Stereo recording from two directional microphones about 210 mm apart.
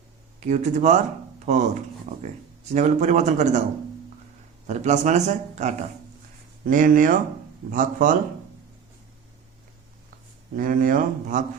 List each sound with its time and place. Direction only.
0.3 s speech: 35° right (ahead or behind)
4.6 s speech: 35° right (ahead or behind)
10.5 s speech: 40° right (ahead or behind)